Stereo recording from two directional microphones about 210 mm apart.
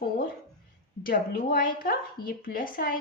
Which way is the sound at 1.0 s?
45° left (ahead or behind).